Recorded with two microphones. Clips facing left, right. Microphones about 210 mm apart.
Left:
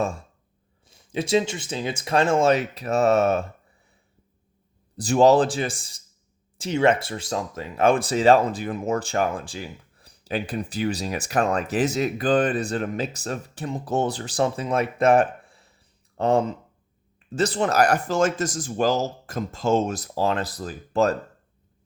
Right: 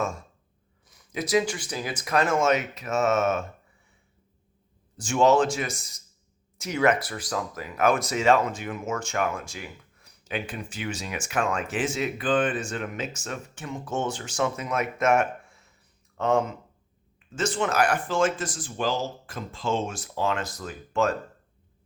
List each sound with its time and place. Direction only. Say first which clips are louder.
0.0 s speech: left 3 dB; 30° left (ahead or behind)
4.9 s speech: left 4 dB; 35° left (ahead or behind)